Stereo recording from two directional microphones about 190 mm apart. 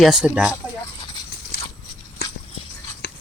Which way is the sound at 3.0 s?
55° left (ahead or behind).